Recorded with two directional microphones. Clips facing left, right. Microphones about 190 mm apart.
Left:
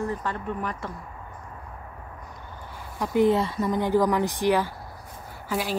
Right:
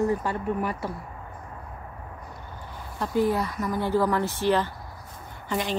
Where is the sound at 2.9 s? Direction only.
15° left (ahead or behind).